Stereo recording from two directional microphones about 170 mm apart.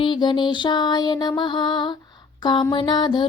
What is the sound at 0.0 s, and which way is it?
Music, 30° left (ahead or behind).